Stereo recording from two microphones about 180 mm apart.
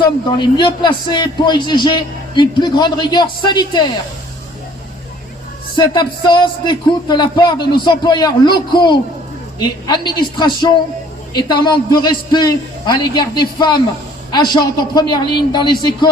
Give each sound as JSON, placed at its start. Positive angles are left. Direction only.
{"t": 0.3, "sound": "a man's voice", "side_deg": 25}
{"t": 5.7, "sound": "a man's voice", "side_deg": 25}